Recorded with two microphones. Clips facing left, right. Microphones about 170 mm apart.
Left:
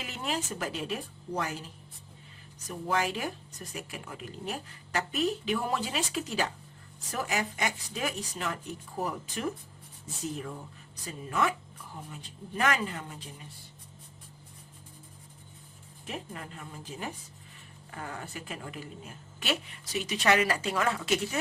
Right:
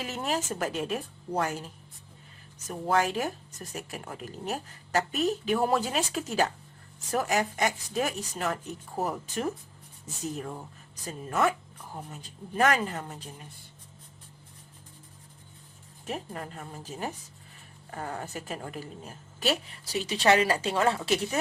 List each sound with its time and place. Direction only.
0.0 s speech: 45° right (ahead or behind)
11.0 s speech: 45° right (ahead or behind)
16.0 s a woman's voice: 40° right (ahead or behind)